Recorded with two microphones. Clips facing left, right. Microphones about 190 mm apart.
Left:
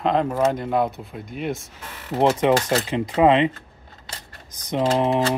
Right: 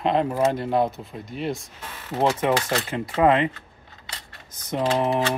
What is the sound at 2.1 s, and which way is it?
Speech, 15° left (ahead or behind).